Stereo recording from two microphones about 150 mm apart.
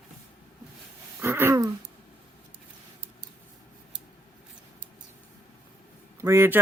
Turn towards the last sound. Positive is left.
turn(degrees=-15)  # may be behind; listen again after turning